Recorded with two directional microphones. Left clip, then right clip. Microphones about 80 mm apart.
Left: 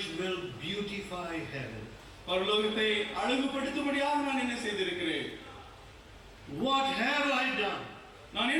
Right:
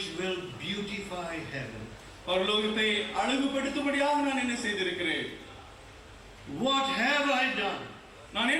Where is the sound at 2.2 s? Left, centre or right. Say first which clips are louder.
Right 2 dB; right.